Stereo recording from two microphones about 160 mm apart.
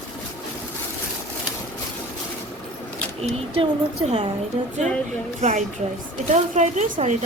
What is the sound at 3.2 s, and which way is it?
Speech, 40° right (ahead or behind).